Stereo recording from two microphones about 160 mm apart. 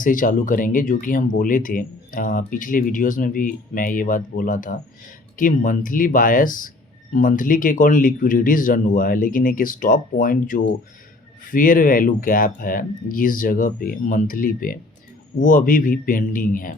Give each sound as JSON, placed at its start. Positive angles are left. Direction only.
{"t": 0.0, "sound": "speech", "side_deg": 55}